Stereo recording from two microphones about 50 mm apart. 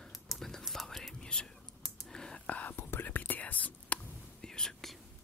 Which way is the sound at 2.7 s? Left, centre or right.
Left.